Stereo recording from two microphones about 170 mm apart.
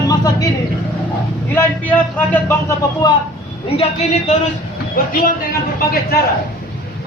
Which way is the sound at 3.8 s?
40° left (ahead or behind).